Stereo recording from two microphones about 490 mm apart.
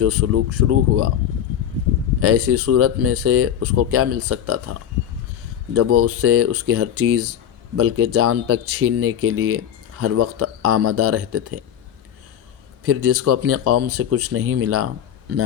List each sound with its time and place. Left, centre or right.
0.0 s speech: right
2.2 s speech: right
12.8 s speech: right